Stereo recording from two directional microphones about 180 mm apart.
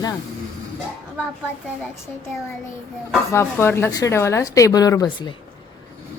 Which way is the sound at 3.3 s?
15° left (ahead or behind).